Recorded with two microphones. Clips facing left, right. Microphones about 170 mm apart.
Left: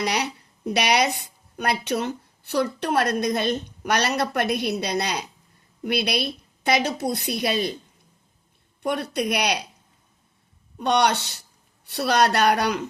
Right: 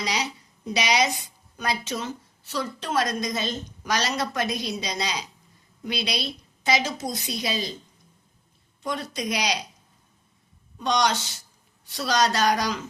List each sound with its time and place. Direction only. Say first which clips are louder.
0.0 s a woman's voice: left 4 dB; 60° left (ahead or behind)
8.8 s a woman's voice: left 5 dB; 65° left (ahead or behind)
10.8 s a woman's voice: left 3 dB; 60° left (ahead or behind)